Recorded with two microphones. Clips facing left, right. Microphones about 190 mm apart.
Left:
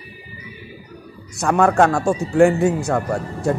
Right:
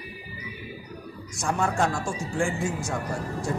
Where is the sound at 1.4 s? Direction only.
65° left (ahead or behind).